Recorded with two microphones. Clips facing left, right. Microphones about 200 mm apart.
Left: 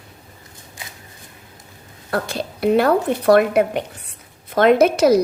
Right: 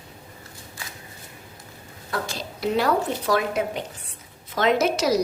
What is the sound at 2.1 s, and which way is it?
A woman's voice, 60° left (ahead or behind).